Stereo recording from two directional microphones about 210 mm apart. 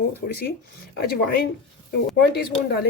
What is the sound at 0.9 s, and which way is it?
Speech, 50° left (ahead or behind).